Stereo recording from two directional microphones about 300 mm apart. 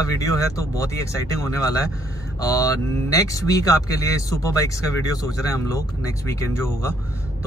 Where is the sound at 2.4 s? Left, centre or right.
Centre.